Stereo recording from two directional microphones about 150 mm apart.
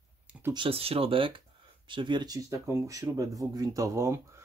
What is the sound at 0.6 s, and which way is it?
Speech, 40° right (ahead or behind).